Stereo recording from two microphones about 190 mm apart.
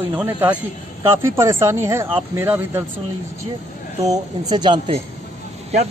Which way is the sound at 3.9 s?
20° right (ahead or behind).